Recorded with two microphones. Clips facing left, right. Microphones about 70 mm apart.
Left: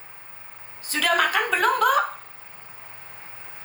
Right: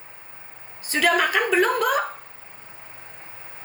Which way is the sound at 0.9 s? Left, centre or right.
Centre.